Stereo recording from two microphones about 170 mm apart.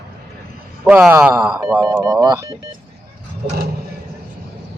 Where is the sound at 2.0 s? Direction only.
20° right (ahead or behind).